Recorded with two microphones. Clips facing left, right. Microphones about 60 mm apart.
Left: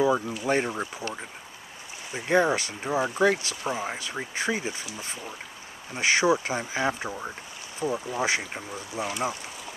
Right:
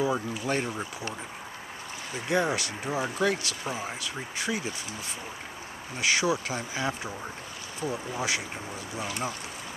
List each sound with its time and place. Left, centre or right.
0.1 s speech: centre
2.2 s speech: left
2.8 s speech: centre
4.4 s speech: left
5.9 s speech: left